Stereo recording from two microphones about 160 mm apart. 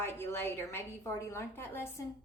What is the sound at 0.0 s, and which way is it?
A woman's voice, 15° left (ahead or behind).